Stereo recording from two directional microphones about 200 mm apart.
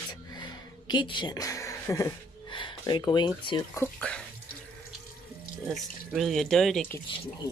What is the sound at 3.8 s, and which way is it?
Speech, 5° left (ahead or behind).